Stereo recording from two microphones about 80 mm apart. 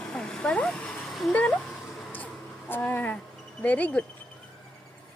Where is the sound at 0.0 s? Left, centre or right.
Centre.